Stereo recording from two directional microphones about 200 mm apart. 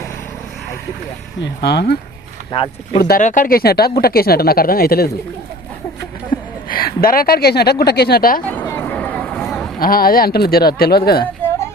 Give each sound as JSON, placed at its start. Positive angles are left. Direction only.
{"t": 1.4, "sound": "speech", "side_deg": 55}
{"t": 2.5, "sound": "speech", "side_deg": 25}
{"t": 3.0, "sound": "speech", "side_deg": 45}
{"t": 6.7, "sound": "speech", "side_deg": 45}
{"t": 8.4, "sound": "vehicle", "side_deg": 10}
{"t": 9.8, "sound": "speech", "side_deg": 45}